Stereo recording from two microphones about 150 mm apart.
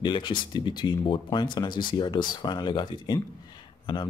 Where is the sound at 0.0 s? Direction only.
30° left (ahead or behind).